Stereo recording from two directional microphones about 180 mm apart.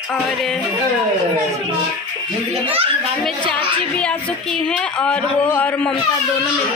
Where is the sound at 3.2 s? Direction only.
5° left (ahead or behind).